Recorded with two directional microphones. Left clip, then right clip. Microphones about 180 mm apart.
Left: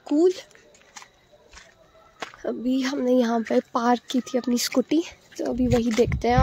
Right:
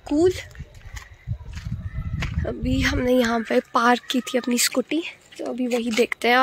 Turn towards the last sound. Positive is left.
turn(degrees=10)  # may be behind; listen again after turning